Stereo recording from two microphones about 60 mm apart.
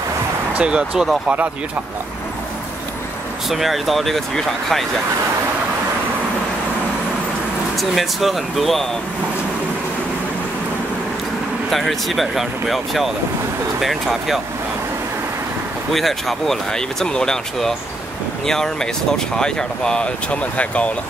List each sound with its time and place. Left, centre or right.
0.6 s speech: centre
3.4 s speech: centre
7.7 s speech: centre
11.7 s speech: centre
15.9 s speech: centre; by 20.9 s left